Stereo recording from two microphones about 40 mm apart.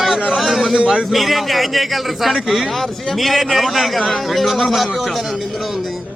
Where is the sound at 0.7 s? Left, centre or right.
Right.